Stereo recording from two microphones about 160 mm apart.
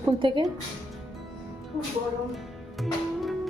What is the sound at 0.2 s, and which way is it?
Speech, 30° right (ahead or behind).